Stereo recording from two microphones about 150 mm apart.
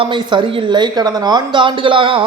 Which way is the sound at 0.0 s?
30° right (ahead or behind).